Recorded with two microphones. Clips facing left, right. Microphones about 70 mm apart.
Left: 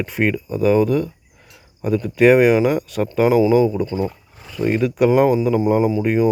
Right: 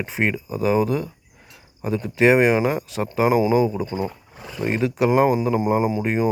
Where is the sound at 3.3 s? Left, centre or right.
Right.